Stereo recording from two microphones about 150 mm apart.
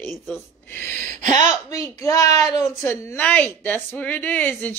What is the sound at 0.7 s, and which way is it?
Speech, 15° left (ahead or behind).